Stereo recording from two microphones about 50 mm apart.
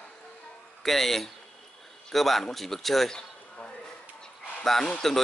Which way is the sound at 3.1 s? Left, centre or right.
Centre.